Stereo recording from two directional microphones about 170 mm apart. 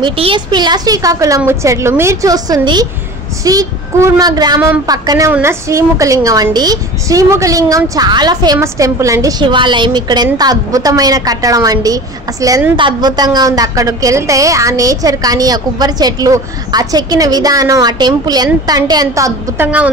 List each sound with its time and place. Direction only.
0.0 s a woman's voice: 30° right (ahead or behind); by 19.9 s 10° right (ahead or behind)